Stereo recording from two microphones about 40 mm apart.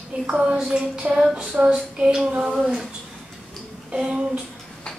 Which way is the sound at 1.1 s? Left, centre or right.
Centre.